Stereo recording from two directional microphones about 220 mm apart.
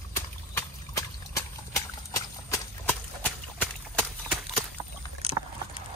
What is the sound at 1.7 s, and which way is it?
Horse, 15° left (ahead or behind).